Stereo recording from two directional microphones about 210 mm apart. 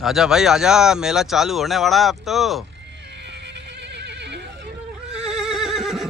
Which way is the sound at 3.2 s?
55° right (ahead or behind).